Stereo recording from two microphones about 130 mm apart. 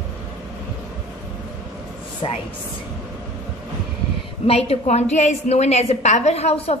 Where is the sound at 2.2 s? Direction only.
40° left (ahead or behind).